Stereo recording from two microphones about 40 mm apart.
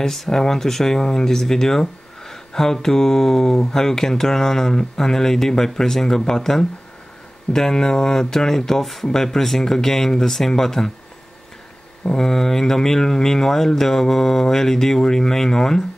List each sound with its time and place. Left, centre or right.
0.0 s speech: centre
12.2 s speech: centre